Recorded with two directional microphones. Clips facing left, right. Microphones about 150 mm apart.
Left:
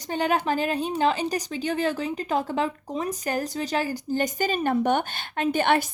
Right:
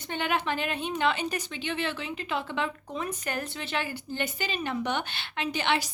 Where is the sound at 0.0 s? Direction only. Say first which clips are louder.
Left 5 dB; 35° left (ahead or behind).